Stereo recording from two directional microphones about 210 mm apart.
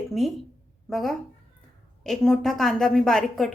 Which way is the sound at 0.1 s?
Centre (ahead or behind).